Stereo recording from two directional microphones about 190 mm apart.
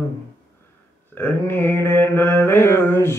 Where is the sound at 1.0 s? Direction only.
10° left (ahead or behind).